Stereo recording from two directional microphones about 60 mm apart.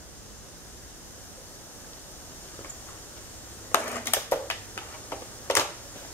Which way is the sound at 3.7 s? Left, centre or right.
Left.